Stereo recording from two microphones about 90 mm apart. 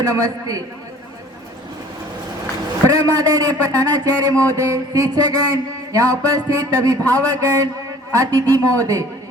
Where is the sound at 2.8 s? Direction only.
40° right (ahead or behind).